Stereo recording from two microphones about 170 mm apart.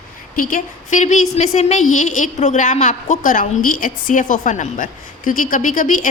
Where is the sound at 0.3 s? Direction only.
55° left (ahead or behind).